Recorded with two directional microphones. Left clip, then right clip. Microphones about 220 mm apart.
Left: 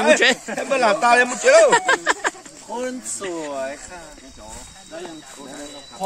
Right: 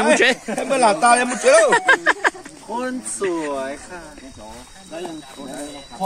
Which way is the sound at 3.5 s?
35° left (ahead or behind).